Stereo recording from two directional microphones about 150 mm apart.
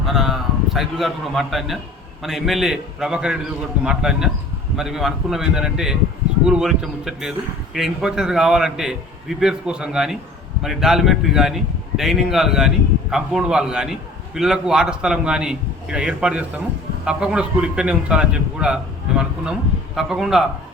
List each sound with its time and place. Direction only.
0.0 s a man's voice: centre (ahead or behind)